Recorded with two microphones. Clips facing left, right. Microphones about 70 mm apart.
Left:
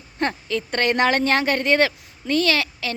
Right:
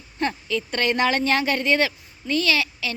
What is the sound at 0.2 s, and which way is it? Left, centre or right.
Speech, left.